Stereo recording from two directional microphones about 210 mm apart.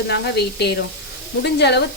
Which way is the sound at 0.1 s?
55° left (ahead or behind).